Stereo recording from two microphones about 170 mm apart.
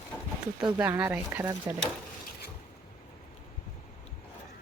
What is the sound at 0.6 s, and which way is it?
Speech, 25° right (ahead or behind).